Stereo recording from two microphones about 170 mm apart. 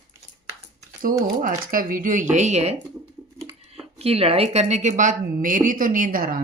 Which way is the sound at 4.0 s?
35° right (ahead or behind).